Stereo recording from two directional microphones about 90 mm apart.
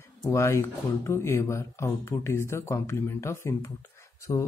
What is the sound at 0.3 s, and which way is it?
Speech, 30° left (ahead or behind).